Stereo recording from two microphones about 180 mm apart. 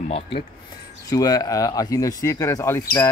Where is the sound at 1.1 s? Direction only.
20° left (ahead or behind).